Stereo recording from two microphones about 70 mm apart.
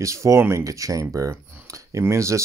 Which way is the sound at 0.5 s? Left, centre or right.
Right.